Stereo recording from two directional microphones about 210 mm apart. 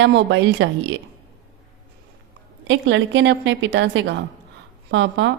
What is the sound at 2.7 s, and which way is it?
A woman's voice, 60° right (ahead or behind).